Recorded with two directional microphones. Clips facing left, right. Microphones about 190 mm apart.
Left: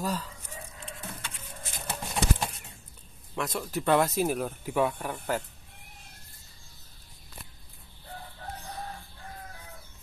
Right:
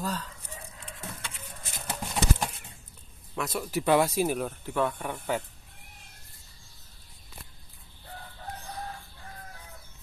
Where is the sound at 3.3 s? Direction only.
Centre (ahead or behind).